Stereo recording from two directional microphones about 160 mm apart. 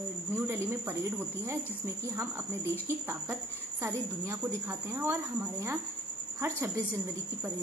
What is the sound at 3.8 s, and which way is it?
Speech, 20° right (ahead or behind).